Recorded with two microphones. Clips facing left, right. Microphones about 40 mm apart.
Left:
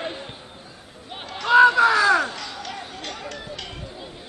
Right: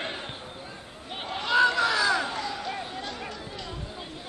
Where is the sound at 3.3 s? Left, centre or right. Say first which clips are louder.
Left 4 dB; left.